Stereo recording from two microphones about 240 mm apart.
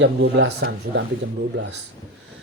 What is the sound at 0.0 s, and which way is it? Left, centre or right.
Speech, right.